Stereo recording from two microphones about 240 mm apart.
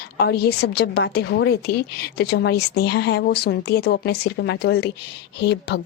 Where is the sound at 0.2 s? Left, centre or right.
Left.